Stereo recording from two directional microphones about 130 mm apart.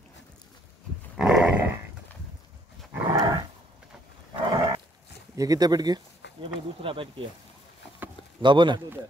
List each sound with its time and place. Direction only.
1.1 s dog: 5° right (ahead or behind)
2.9 s dog: 25° right (ahead or behind)
4.5 s wild animals: 30° right (ahead or behind)
5.3 s speech: 30° right (ahead or behind)
8.4 s speech: 35° right (ahead or behind)